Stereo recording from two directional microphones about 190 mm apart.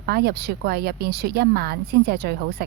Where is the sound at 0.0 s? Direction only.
55° right (ahead or behind).